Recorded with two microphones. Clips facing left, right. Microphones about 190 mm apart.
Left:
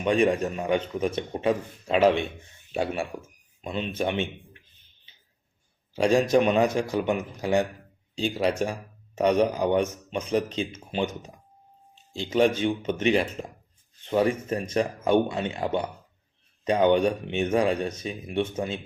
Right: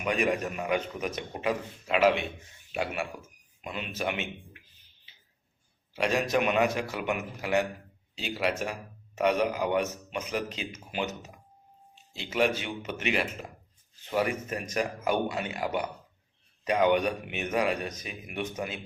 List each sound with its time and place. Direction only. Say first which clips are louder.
0.0 s a man's voice: left 6 dB; 30° left (ahead or behind)
6.0 s a man's voice: left 6 dB; 30° left (ahead or behind)
12.2 s a man's voice: left 6 dB; 30° left (ahead or behind)